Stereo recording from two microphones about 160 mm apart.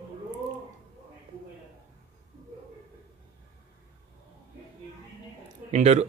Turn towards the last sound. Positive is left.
turn(degrees=-45)  # may be behind; listen again after turning